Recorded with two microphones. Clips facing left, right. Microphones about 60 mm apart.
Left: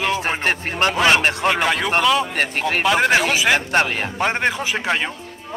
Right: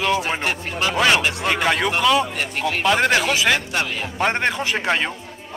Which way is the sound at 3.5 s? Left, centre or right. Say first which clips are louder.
Left 5 dB; left.